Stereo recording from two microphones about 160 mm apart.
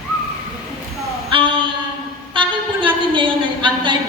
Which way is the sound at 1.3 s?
35° right (ahead or behind).